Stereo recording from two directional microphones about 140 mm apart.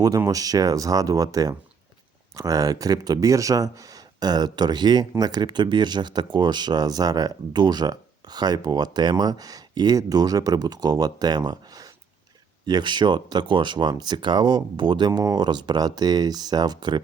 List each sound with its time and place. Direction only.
0.2 s speech: 25° right (ahead or behind)